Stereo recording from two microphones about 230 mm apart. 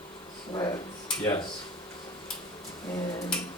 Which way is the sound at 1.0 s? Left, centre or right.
Centre.